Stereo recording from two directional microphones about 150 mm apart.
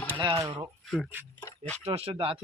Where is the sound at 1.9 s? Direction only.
40° right (ahead or behind).